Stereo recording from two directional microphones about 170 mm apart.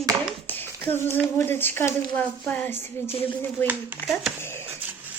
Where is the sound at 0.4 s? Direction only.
10° left (ahead or behind).